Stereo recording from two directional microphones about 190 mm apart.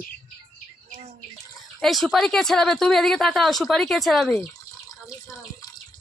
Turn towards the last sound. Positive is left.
turn(degrees=20)  # may be behind; listen again after turning